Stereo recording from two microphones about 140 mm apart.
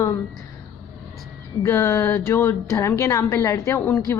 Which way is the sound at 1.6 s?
20° left (ahead or behind).